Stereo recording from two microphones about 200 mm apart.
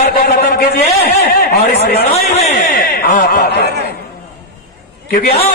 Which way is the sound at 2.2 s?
35° left (ahead or behind).